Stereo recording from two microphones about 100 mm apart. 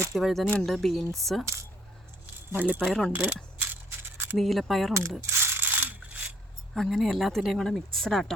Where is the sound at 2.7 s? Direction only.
5° left (ahead or behind).